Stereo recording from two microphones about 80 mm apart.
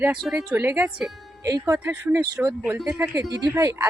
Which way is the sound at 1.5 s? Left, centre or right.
Right.